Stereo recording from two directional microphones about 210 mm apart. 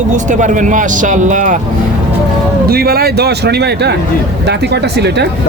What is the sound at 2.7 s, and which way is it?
Speech, 45° right (ahead or behind).